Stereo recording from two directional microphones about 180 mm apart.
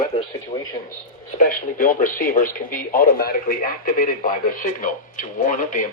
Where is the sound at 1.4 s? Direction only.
55° left (ahead or behind).